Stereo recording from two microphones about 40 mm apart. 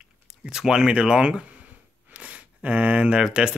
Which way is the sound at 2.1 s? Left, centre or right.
Right.